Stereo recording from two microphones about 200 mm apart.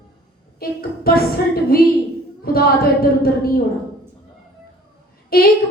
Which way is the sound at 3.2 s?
50° left (ahead or behind).